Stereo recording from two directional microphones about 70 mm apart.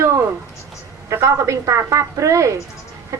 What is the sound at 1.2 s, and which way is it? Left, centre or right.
Speech, right.